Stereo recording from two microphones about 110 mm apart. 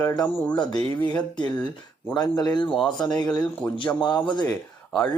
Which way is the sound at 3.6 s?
10° left (ahead or behind).